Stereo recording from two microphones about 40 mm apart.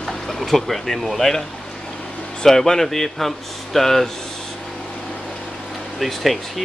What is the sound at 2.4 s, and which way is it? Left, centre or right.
Speech, centre.